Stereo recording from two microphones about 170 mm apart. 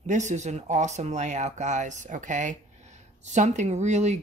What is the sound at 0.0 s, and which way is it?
Speech, 45° right (ahead or behind).